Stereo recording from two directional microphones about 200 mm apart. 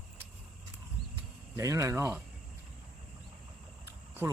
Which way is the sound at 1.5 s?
15° right (ahead or behind).